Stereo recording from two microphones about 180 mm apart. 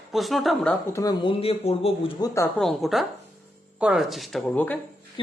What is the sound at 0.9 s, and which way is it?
Speech, 20° left (ahead or behind).